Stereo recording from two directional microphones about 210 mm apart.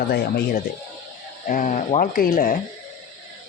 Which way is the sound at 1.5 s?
40° left (ahead or behind).